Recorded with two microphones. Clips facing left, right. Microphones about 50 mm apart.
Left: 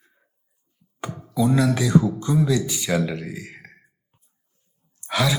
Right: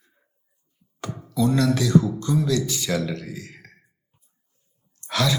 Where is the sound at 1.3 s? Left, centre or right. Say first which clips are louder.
Left 1 dB; centre.